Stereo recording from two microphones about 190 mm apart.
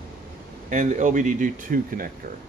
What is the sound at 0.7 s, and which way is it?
Speech, 40° right (ahead or behind).